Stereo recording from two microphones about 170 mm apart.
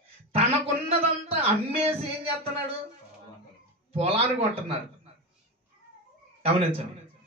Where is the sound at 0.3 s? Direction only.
35° right (ahead or behind).